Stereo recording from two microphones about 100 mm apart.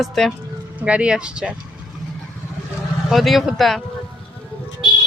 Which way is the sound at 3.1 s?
Centre (ahead or behind).